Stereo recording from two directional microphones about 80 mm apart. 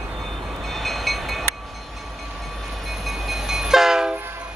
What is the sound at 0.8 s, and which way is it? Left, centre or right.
Train, centre.